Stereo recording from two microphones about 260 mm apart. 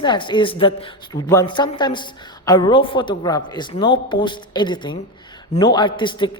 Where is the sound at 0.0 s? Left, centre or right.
Centre.